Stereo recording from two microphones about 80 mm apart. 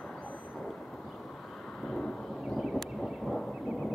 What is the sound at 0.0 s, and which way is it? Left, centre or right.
Vehicle, centre.